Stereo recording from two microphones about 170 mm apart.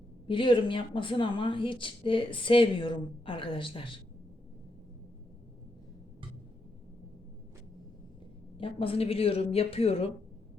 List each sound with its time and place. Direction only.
0.3 s speech: 30° left (ahead or behind)
8.5 s speech: 30° left (ahead or behind)